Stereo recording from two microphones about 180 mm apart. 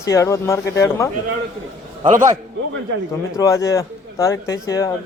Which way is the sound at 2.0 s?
45° right (ahead or behind).